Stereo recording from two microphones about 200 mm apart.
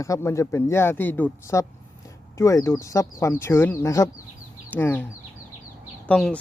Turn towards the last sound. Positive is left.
turn(degrees=5)  # may be behind; listen again after turning